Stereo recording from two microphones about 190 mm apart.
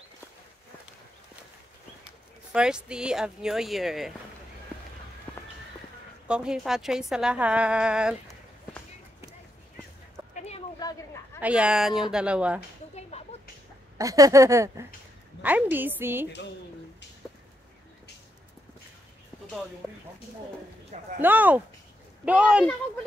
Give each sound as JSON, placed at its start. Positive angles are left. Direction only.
{"t": 2.5, "sound": "a woman's voice", "side_deg": -5}
{"t": 5.3, "sound": "run", "side_deg": 5}
{"t": 6.2, "sound": "a woman's voice", "side_deg": -5}
{"t": 11.4, "sound": "a woman's voice", "side_deg": -5}
{"t": 13.1, "sound": "a sound", "side_deg": 35}
{"t": 13.9, "sound": "speech", "side_deg": -15}
{"t": 21.2, "sound": "a woman's voice", "side_deg": -10}